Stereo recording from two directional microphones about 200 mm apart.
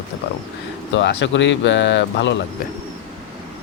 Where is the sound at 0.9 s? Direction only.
65° left (ahead or behind).